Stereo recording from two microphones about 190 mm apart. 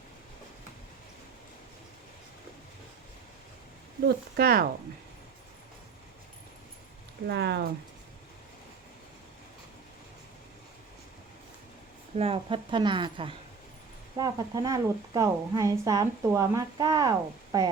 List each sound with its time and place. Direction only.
4.4 s speech: 55° right (ahead or behind)
7.3 s speech: 65° right (ahead or behind)
12.1 s a woman's voice: 30° right (ahead or behind)